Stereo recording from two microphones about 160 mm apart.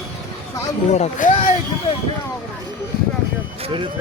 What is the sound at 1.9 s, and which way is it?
Speech, 35° left (ahead or behind).